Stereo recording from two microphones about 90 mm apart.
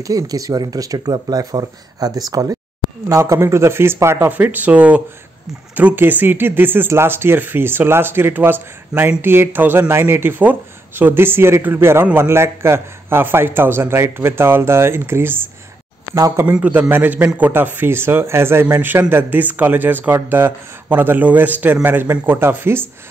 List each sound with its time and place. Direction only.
0.0 s speech: 40° right (ahead or behind)
16.2 s speech: 40° right (ahead or behind)
16.4 s speech: 15° right (ahead or behind)